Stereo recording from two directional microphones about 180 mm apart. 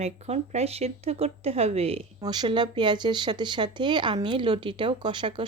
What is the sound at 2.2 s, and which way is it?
Speech, 25° right (ahead or behind).